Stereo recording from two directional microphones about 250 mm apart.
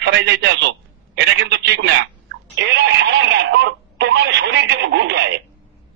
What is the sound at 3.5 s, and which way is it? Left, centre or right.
Radio, right.